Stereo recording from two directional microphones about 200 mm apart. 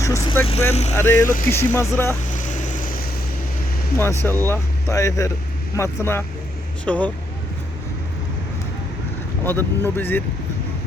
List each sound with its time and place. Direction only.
0.0 s speech: 15° left (ahead or behind)
0.4 s speech: 30° left (ahead or behind)
0.9 s speech: 10° left (ahead or behind)
2.3 s vehicle: 40° left (ahead or behind)
4.2 s speech: 10° left (ahead or behind)
9.4 s speech: 10° left (ahead or behind)